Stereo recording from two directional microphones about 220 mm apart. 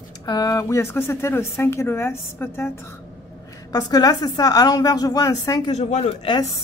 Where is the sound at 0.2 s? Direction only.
15° left (ahead or behind).